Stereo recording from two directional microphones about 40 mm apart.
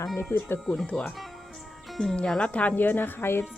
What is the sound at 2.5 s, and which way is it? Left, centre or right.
Speech, left.